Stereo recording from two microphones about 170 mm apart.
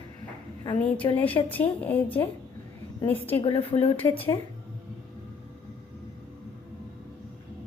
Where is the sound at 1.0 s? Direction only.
25° left (ahead or behind).